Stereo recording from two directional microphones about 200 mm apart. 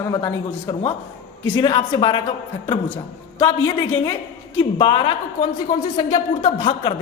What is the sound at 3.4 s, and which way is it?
Speech, 20° left (ahead or behind).